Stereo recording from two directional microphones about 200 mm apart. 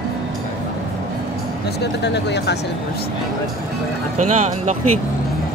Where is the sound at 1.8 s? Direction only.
60° left (ahead or behind).